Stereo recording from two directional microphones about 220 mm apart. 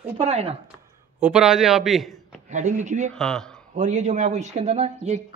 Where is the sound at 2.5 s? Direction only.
35° right (ahead or behind).